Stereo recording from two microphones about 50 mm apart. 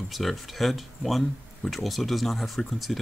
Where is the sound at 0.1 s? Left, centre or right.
Centre.